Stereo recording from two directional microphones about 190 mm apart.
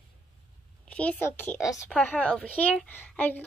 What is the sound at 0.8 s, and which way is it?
A woman's voice, 5° left (ahead or behind).